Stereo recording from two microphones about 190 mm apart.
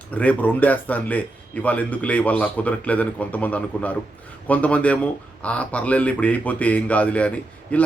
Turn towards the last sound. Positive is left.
turn(degrees=5)  # may be behind; listen again after turning